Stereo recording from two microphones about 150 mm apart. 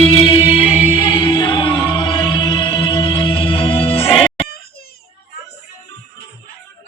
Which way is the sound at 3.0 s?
40° left (ahead or behind).